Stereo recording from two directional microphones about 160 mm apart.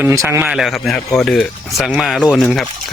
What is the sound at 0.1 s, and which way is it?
Speech, 15° right (ahead or behind).